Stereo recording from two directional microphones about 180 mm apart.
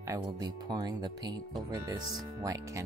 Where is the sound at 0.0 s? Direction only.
20° right (ahead or behind).